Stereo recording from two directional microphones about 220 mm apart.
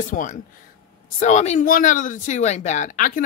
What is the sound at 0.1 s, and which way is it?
Speech, 35° left (ahead or behind).